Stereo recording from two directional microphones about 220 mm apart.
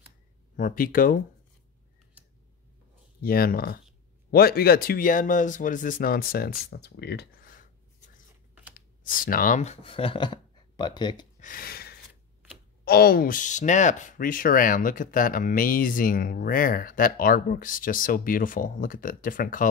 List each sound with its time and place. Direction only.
0.6 s speech: 40° left (ahead or behind)
3.2 s speech: 40° left (ahead or behind)
8.7 s speech: 40° left (ahead or behind); by 11.2 s 20° left (ahead or behind)
11.3 s a sound: 40° left (ahead or behind)
12.8 s speech: 45° left (ahead or behind)